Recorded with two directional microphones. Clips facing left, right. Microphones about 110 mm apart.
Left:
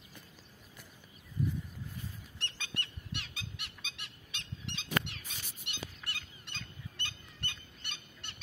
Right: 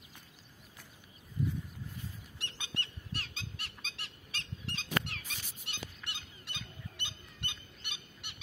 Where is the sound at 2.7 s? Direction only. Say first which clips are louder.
Even; 35° right (ahead or behind).